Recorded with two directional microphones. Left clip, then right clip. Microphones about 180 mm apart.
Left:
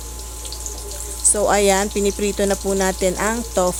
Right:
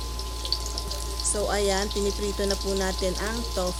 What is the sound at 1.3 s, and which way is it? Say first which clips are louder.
Speech: left 10 dB; 40° left (ahead or behind).